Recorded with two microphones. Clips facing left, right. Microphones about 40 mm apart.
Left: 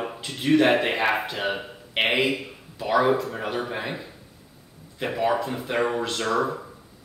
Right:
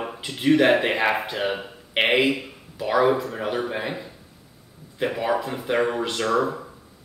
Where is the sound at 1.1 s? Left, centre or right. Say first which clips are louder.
Right 1 dB; right.